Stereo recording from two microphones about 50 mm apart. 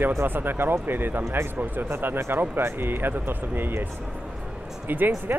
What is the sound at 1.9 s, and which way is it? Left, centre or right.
Speech, right.